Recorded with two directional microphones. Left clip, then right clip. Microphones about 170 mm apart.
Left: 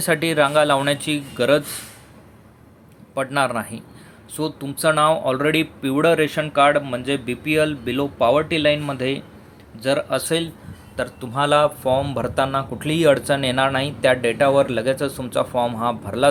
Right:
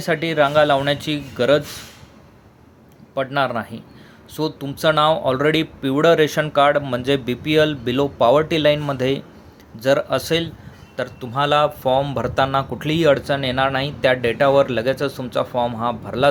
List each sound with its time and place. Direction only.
0.0 s a man's voice: centre (ahead or behind)
3.2 s a man's voice: 5° right (ahead or behind)